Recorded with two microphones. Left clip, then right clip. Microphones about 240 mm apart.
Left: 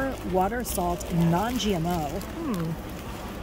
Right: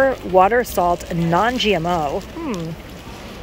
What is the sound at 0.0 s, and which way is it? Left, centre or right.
Speech, centre.